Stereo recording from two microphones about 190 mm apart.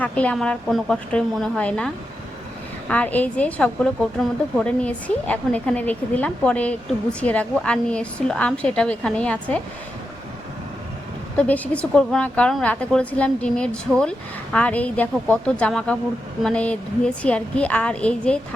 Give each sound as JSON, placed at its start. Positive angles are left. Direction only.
{"t": 0.0, "sound": "a woman's voice", "side_deg": 5}
{"t": 2.9, "sound": "a woman's voice", "side_deg": 10}
{"t": 11.3, "sound": "a woman's voice", "side_deg": 10}